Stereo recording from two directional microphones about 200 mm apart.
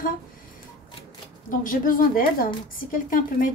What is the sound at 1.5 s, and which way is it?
A woman's voice, 40° left (ahead or behind).